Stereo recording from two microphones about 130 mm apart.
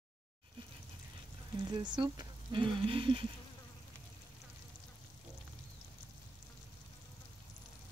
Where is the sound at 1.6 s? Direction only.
35° right (ahead or behind).